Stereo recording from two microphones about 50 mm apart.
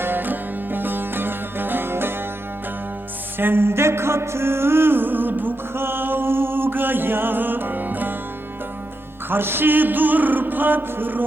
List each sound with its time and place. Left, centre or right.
0.0 s music: right
3.3 s music: right
9.3 s music: right